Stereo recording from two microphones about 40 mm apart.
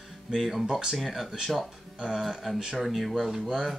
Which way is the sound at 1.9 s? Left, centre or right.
Centre.